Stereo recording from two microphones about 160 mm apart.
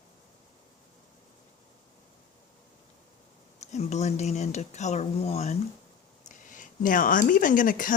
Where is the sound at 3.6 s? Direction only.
45° left (ahead or behind).